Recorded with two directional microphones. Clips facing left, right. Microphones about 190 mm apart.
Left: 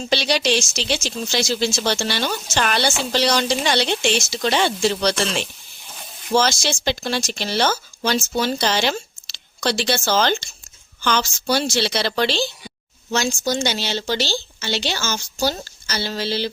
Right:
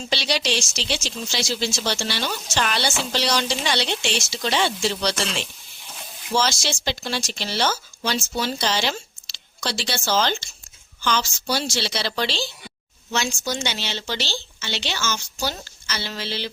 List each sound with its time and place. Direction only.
0.1 s a woman's voice: 50° left (ahead or behind)
6.3 s a woman's voice: 50° left (ahead or behind)
13.1 s speech: 40° left (ahead or behind)